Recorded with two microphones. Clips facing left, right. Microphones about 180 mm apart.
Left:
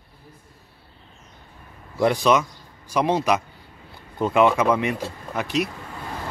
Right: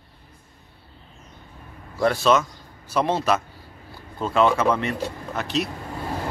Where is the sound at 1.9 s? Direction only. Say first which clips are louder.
Left 1 dB; 15° left (ahead or behind).